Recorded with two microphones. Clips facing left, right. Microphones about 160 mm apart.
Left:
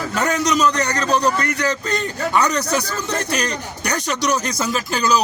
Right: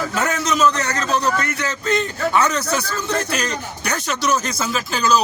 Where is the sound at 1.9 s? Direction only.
Centre (ahead or behind).